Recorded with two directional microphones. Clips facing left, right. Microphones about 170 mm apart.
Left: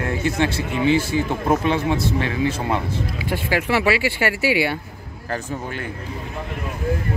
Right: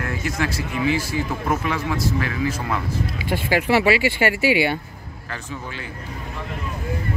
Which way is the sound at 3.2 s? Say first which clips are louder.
Right 2 dB; 30° right (ahead or behind).